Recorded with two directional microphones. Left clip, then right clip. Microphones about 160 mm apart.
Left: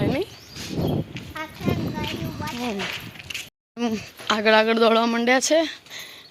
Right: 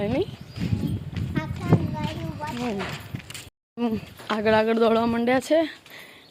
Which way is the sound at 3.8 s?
15° right (ahead or behind).